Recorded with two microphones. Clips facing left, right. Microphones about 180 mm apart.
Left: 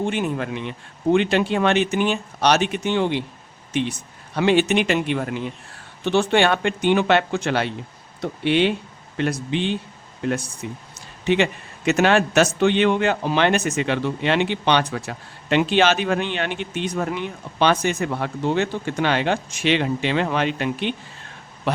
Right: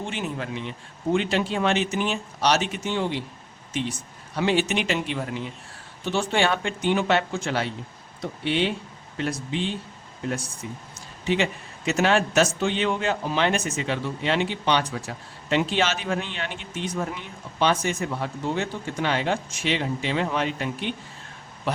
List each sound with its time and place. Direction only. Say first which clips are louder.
0.0 s a man's voice: left 7 dB; 55° left (ahead or behind)
11.9 s a man's voice: left 4 dB; 65° left (ahead or behind)